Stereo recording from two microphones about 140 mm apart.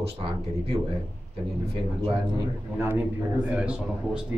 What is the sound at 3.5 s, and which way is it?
Speech, 5° right (ahead or behind).